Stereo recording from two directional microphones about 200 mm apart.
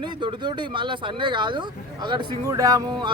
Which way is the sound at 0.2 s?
25° right (ahead or behind).